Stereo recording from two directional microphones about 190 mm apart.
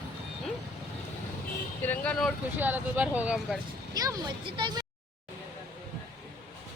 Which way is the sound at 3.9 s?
20° right (ahead or behind).